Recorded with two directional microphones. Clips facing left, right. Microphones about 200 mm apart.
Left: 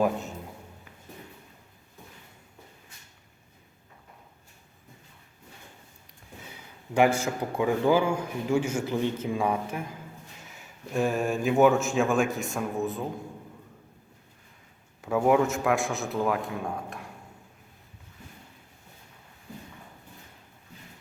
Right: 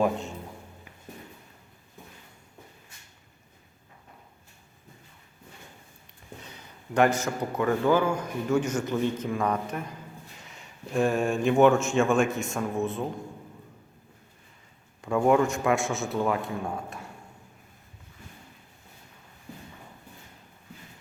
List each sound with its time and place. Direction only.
0.0 s music: centre (ahead or behind)
6.5 s a sound: 10° left (ahead or behind)
7.3 s a man's voice: 10° left (ahead or behind)
15.0 s a man's voice: 5° left (ahead or behind)